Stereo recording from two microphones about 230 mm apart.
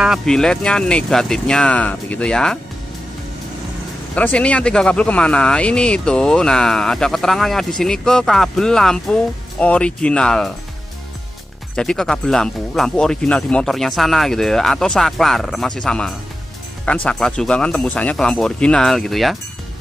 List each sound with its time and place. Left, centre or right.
0.0 s speech: centre
4.1 s speech: centre
11.7 s speech: centre